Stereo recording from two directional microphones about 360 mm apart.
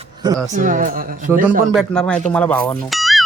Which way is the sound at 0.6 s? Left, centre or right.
Right.